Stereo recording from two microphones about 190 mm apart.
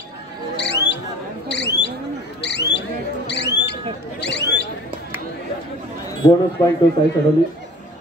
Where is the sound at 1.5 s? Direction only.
65° left (ahead or behind).